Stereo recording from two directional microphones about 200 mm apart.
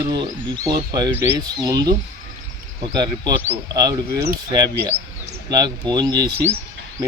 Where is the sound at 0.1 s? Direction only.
20° right (ahead or behind).